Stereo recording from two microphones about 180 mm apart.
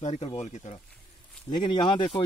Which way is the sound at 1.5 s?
25° left (ahead or behind).